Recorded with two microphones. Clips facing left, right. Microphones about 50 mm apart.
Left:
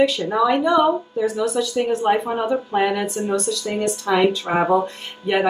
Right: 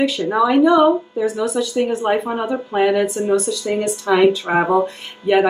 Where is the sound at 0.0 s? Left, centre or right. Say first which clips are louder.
Right 1 dB; centre.